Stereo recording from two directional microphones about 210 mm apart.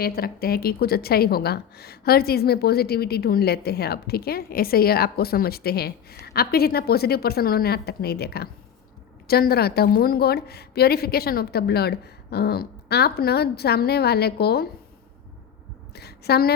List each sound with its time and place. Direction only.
0.0 s a woman's voice: 45° left (ahead or behind)
16.0 s a woman's voice: 50° left (ahead or behind)